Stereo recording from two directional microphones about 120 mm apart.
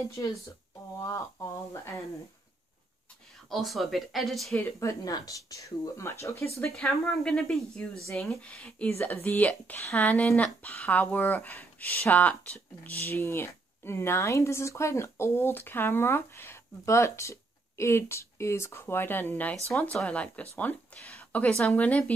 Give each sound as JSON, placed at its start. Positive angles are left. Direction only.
{"t": 1.0, "sound": "a sound", "side_deg": 25}
{"t": 3.4, "sound": "speech", "side_deg": 0}
{"t": 4.6, "sound": "speech", "side_deg": 20}
{"t": 6.7, "sound": "speech", "side_deg": 5}